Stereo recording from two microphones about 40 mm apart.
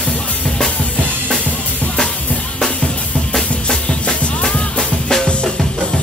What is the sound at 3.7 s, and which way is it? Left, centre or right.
Music, left.